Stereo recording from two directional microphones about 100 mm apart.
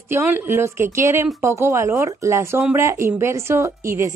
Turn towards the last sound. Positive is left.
turn(degrees=-30)  # may be behind; listen again after turning